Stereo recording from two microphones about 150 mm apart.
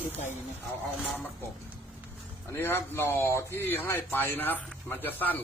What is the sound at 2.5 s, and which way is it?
A man's voice, 15° left (ahead or behind).